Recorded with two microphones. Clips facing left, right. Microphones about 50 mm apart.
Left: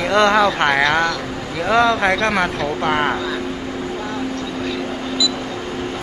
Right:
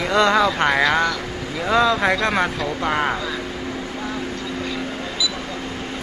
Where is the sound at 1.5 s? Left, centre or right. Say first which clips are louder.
Left 2 dB; left.